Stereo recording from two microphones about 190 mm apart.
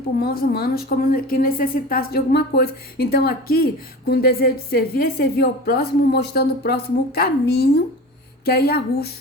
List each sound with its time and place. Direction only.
0.2 s a woman's voice: 50° left (ahead or behind)